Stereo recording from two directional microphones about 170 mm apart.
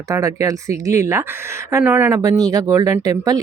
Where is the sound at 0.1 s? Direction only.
20° right (ahead or behind).